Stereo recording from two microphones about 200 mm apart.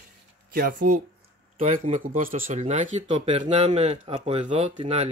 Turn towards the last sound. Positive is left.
turn(degrees=-30)  # may be behind; listen again after turning